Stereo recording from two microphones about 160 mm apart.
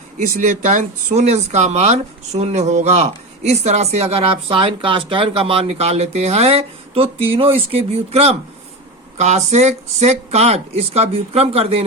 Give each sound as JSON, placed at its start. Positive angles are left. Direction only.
{"t": 0.2, "sound": "speech", "side_deg": -55}